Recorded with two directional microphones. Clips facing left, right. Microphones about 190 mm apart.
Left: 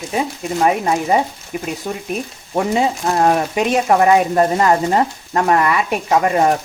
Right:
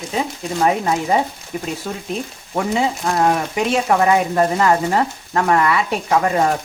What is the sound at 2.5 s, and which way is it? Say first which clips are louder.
Stir: left 2 dB; 25° left (ahead or behind).